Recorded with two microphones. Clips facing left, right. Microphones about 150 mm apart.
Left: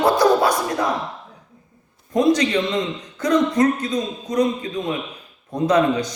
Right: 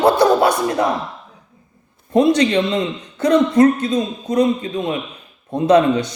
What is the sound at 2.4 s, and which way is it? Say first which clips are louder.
A man's voice: right 4 dB; 30° right (ahead or behind).